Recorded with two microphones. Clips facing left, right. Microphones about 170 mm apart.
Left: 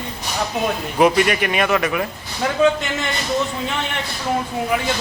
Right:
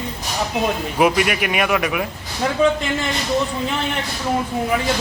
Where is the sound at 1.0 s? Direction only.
5° right (ahead or behind).